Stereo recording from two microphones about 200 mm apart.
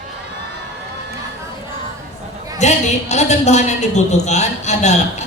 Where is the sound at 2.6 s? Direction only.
35° left (ahead or behind).